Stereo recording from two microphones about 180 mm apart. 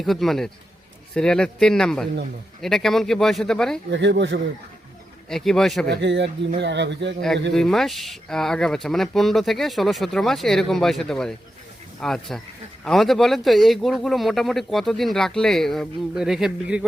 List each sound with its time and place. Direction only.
0.0 s speech: centre (ahead or behind)
3.9 s speech: 75° right (ahead or behind)
5.3 s speech: centre (ahead or behind)
5.9 s speech: 75° right (ahead or behind)
7.5 s speech: centre (ahead or behind)